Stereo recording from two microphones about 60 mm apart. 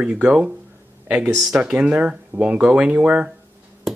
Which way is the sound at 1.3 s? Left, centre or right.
Centre.